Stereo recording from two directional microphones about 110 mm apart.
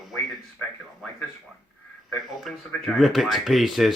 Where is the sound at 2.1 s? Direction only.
Centre (ahead or behind).